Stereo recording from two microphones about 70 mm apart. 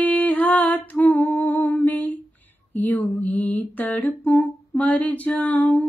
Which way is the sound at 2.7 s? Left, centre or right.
Left.